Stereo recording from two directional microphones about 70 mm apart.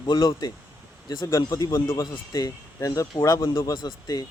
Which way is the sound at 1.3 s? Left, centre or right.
Left.